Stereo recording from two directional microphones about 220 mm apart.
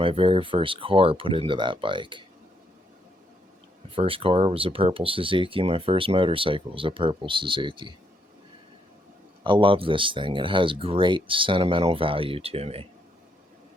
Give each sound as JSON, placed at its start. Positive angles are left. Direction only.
{"t": 0.0, "sound": "speech", "side_deg": -25}
{"t": 3.9, "sound": "speech", "side_deg": -25}
{"t": 9.4, "sound": "speech", "side_deg": -20}